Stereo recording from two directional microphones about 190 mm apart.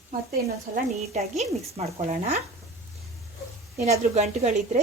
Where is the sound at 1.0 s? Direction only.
35° right (ahead or behind).